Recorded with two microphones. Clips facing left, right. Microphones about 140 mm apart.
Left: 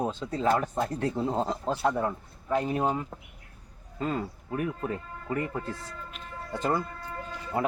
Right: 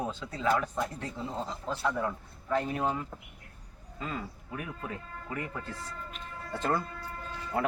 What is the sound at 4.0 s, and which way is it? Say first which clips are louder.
Speech: left 7 dB; 45° left (ahead or behind).